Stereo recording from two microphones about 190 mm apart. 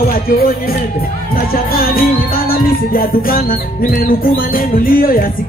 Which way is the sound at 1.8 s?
50° left (ahead or behind).